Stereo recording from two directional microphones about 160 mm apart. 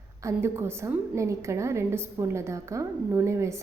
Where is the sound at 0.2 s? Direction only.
15° right (ahead or behind).